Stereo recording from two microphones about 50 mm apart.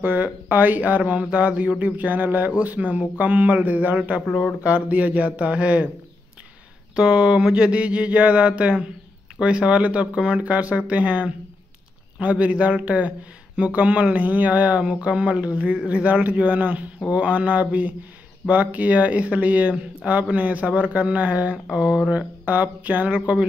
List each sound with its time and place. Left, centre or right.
0.0 s speech: right
7.0 s speech: right
21.6 s a sound: centre
22.4 s speech: right